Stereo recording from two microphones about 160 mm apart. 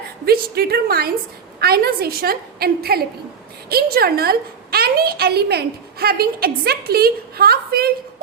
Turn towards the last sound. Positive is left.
turn(degrees=-75)  # may be behind; listen again after turning